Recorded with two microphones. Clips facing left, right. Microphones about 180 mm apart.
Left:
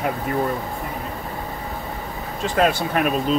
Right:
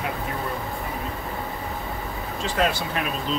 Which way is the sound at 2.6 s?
55° left (ahead or behind).